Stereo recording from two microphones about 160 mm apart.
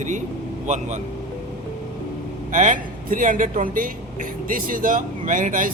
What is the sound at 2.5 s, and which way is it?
A man's voice, 55° right (ahead or behind).